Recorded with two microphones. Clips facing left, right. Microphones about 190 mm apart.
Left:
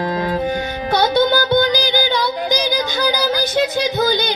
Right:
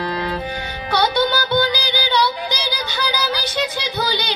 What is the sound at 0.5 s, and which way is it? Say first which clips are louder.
Music: left 5 dB; 45° left (ahead or behind).